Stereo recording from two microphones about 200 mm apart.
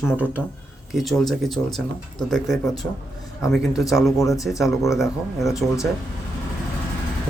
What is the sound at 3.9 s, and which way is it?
Speech, 15° left (ahead or behind).